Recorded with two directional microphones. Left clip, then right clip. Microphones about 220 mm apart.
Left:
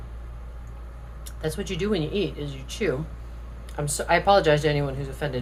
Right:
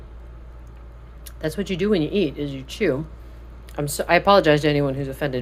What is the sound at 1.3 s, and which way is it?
Speech, 30° right (ahead or behind).